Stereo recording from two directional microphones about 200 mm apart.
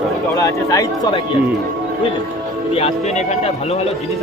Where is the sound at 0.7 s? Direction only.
15° left (ahead or behind).